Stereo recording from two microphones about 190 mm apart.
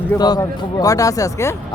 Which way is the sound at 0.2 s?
20° left (ahead or behind).